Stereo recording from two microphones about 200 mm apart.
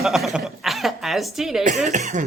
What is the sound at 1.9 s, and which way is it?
Speech, 40° right (ahead or behind).